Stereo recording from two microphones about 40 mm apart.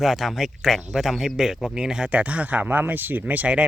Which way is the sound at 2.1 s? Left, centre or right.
Right.